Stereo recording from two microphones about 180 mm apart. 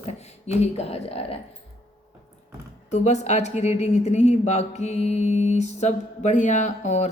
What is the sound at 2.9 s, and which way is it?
A woman's voice, 40° left (ahead or behind).